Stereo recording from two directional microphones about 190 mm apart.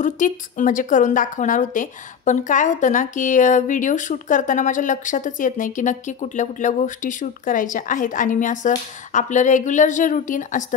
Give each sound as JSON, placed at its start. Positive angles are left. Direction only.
{"t": 0.0, "sound": "a woman's voice", "side_deg": 40}